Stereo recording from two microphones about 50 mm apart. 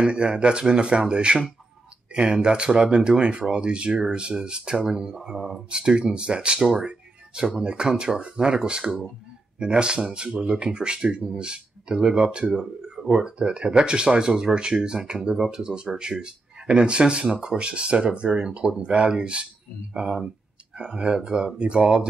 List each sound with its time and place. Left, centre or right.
0.0 s speech: centre